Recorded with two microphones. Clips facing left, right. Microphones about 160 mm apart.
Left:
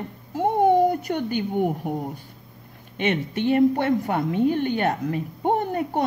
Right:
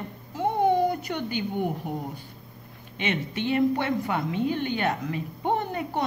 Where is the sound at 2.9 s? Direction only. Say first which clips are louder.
Left 5 dB; 45° left (ahead or behind).